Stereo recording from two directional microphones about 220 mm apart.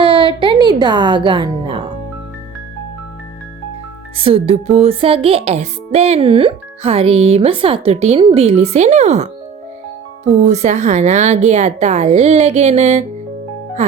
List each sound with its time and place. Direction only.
0.0 s music: 25° right (ahead or behind)
4.2 s speech: 25° right (ahead or behind)
10.4 s a woman's voice: 30° right (ahead or behind)